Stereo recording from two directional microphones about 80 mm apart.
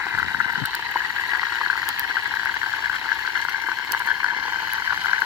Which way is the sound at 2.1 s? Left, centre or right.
Right.